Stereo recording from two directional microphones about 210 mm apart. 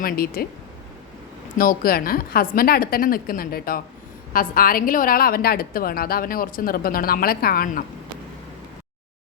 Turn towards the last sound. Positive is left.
turn(degrees=45)  # may be behind; listen again after turning